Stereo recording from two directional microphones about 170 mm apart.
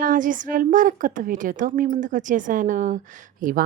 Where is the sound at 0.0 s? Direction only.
50° right (ahead or behind).